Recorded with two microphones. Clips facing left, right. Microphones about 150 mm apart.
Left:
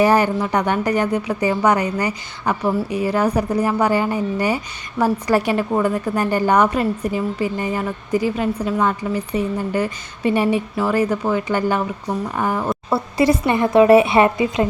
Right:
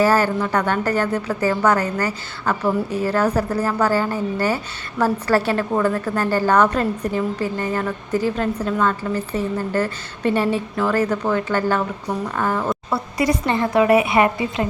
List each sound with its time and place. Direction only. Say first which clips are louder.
0.0 s a woman's voice: left 2 dB; 15° left (ahead or behind)
13.8 s a woman's voice: left 4 dB; 30° left (ahead or behind)